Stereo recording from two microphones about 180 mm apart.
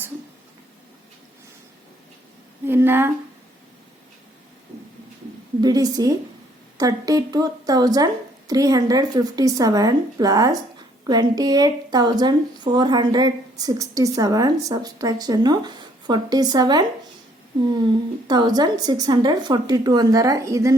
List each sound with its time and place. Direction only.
2.6 s speech: 10° right (ahead or behind)
5.5 s a woman's voice: 20° right (ahead or behind)
18.3 s a woman's voice: 25° right (ahead or behind)